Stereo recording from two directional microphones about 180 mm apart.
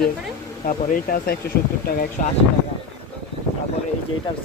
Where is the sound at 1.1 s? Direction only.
55° left (ahead or behind).